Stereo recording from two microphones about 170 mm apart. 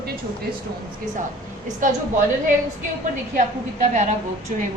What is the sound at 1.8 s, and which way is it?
Speech, 50° right (ahead or behind).